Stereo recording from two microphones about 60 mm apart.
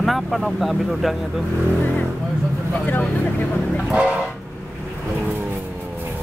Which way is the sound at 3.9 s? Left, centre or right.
Centre.